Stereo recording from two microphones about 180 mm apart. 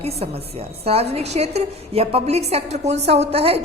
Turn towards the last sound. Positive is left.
turn(degrees=-35)  # may be behind; listen again after turning